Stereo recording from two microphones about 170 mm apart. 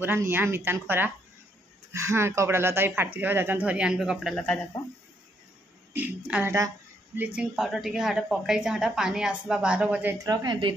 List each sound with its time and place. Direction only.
0.0 s speech: 15° right (ahead or behind); by 4.6 s 5° left (ahead or behind)
5.9 s speech: 10° right (ahead or behind)
10.1 s a woman's voice: 20° right (ahead or behind)